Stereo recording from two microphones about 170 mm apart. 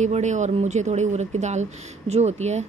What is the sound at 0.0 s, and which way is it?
Speech, 45° right (ahead or behind).